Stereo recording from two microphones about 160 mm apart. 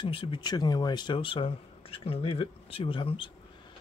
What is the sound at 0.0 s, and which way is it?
Speech, 30° left (ahead or behind).